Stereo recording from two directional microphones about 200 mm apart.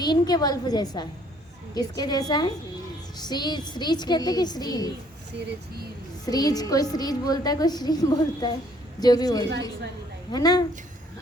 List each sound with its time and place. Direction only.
0.0 s a woman's voice: 20° left (ahead or behind)
5.5 s speech: 50° right (ahead or behind)
6.2 s a woman's voice: 20° left (ahead or behind)